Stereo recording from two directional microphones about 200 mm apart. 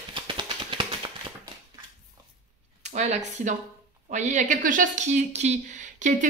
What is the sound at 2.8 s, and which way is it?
Speech, 35° right (ahead or behind).